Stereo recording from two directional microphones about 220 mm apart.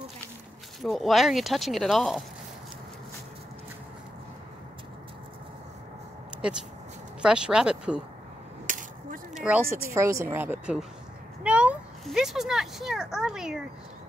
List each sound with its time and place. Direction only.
0.8 s speech: centre (ahead or behind)
6.4 s speech: 5° right (ahead or behind)
8.6 s a sound: 35° right (ahead or behind)
9.3 s speech: 5° right (ahead or behind)